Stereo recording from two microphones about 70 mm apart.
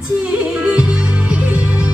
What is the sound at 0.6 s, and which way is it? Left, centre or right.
Music, centre.